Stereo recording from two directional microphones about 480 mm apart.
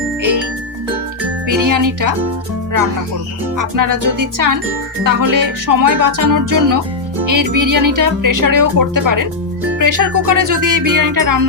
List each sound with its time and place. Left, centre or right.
1.5 s speech: right
3.6 s speech: right